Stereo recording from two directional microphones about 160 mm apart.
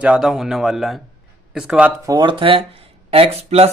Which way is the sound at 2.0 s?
25° right (ahead or behind).